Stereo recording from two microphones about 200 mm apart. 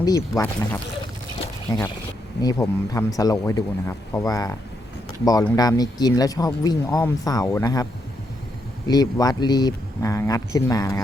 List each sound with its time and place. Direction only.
0.0 s speech: 15° left (ahead or behind)
8.9 s speech: 20° left (ahead or behind)